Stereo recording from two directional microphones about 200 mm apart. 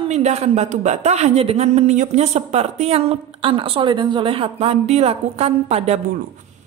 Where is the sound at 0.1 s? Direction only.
35° right (ahead or behind).